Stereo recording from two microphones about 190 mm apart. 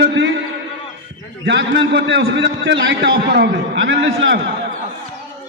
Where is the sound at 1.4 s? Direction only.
65° right (ahead or behind).